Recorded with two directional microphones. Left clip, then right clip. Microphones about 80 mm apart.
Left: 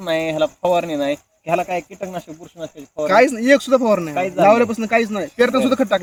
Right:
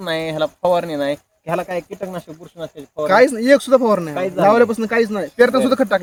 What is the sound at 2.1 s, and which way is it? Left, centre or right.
Speech, right.